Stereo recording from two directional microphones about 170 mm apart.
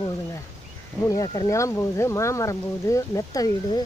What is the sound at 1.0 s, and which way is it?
Speech, 20° left (ahead or behind).